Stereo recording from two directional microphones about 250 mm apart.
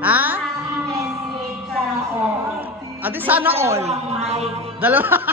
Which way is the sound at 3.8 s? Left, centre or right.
Right.